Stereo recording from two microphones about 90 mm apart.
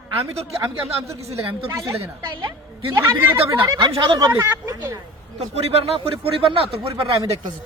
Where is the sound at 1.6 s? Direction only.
30° right (ahead or behind).